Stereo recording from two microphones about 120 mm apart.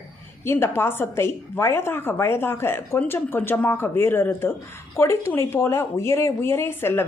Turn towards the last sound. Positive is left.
turn(degrees=20)  # may be behind; listen again after turning